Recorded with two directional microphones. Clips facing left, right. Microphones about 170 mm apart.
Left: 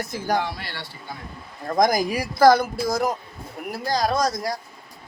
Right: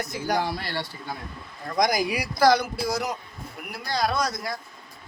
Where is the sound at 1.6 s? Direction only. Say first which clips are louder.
Left 4 dB; 45° left (ahead or behind).